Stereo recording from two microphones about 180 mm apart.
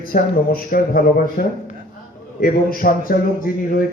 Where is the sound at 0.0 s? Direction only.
50° left (ahead or behind).